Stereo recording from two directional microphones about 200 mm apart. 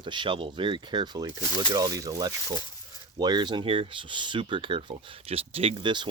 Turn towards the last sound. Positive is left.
turn(degrees=-25)  # may be behind; listen again after turning